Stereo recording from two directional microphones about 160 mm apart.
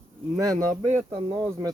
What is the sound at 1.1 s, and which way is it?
Speech, 35° right (ahead or behind).